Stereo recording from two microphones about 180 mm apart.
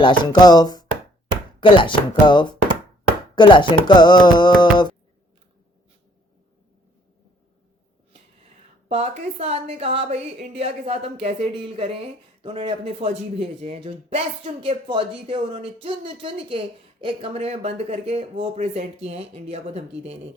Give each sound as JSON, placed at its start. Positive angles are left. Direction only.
{"t": 0.0, "sound": "music", "side_deg": 25}
{"t": 8.9, "sound": "a woman's voice", "side_deg": -35}